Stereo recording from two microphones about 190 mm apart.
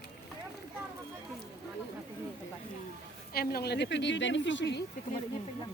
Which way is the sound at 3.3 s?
55° left (ahead or behind).